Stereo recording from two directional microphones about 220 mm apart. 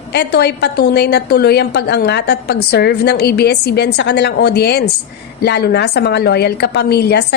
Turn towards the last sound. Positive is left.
turn(degrees=45)  # may be behind; listen again after turning